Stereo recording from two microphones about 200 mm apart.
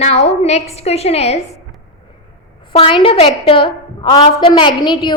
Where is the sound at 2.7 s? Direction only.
25° left (ahead or behind).